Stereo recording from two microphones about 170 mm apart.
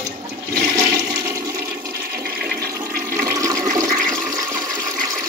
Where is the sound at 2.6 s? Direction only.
15° right (ahead or behind).